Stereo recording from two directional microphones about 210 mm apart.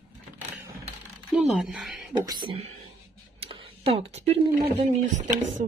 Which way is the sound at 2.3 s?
25° right (ahead or behind).